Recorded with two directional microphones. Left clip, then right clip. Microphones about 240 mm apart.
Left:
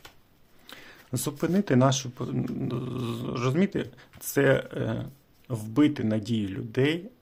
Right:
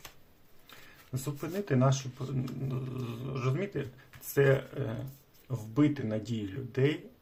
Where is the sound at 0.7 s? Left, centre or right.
Left.